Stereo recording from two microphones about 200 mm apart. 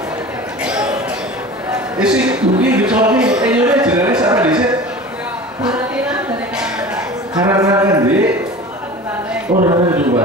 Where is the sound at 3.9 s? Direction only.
10° right (ahead or behind).